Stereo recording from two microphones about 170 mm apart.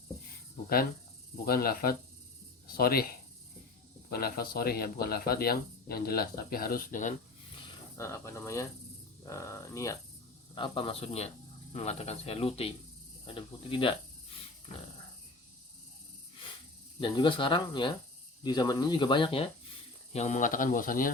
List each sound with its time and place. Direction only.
1.5 s speech: 65° left (ahead or behind)
4.1 s speech: 65° left (ahead or behind)
7.9 s speech: 15° left (ahead or behind)
10.5 s speech: 30° left (ahead or behind)
17.0 s speech: 30° left (ahead or behind)
20.1 s speech: 45° left (ahead or behind)